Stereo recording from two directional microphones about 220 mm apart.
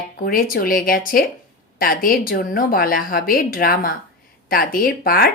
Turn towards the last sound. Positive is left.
turn(degrees=45)  # may be behind; listen again after turning